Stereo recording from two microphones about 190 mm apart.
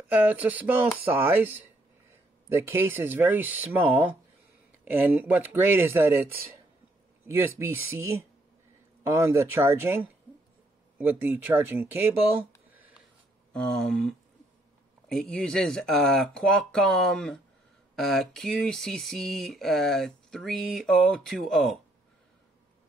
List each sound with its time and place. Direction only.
0.1 s speech: 10° right (ahead or behind)
7.2 s speech: 10° right (ahead or behind)
9.0 s speech: 15° right (ahead or behind)
13.5 s speech: 5° left (ahead or behind)